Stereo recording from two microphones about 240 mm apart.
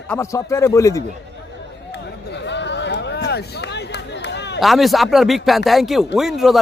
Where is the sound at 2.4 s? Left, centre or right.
Left.